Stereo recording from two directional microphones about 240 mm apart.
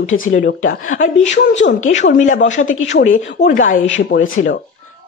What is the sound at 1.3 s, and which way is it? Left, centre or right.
Speech, left.